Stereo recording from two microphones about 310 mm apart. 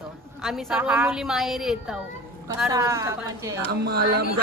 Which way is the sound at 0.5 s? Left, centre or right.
Centre.